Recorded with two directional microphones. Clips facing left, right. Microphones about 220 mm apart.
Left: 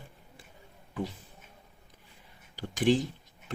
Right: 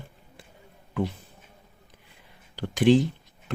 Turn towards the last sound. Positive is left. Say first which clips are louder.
# right 6 dB
turn(degrees=-70)  # may be behind; listen again after turning